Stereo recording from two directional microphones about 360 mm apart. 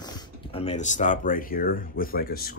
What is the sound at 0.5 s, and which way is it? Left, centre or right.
Speech, centre.